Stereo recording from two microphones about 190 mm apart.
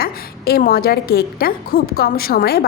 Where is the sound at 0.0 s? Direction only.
55° left (ahead or behind).